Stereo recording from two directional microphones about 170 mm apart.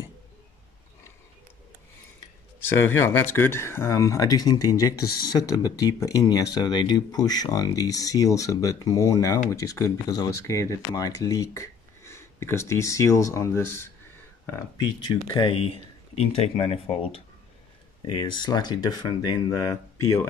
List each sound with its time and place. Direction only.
2.8 s speech: 15° left (ahead or behind)
15.0 s speech: 25° left (ahead or behind)